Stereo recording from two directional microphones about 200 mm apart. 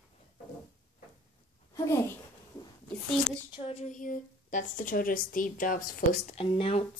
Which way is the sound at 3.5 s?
35° left (ahead or behind).